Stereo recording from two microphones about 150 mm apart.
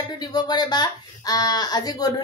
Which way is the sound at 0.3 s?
25° left (ahead or behind).